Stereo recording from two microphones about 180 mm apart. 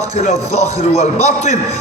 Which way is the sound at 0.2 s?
40° left (ahead or behind).